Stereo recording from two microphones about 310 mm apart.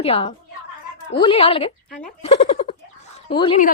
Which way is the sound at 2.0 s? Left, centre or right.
Centre.